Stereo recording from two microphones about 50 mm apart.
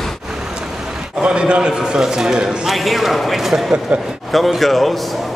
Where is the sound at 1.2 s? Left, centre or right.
Right.